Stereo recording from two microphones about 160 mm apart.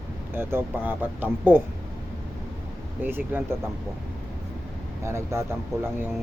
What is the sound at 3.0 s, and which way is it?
Speech, 10° right (ahead or behind).